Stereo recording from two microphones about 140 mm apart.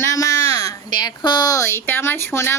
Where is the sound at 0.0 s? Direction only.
20° left (ahead or behind).